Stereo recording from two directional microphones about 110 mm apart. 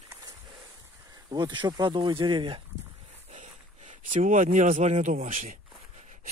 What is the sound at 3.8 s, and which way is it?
A man's voice, 90° right.